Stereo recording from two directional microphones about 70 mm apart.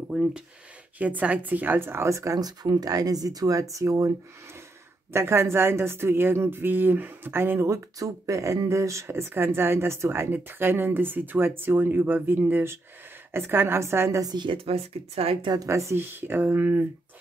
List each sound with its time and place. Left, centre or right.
0.1 s speech: centre
0.9 s a woman's voice: right
5.1 s speech: right
14.2 s speech: right
15.6 s a woman's voice: right
16.0 s speech: right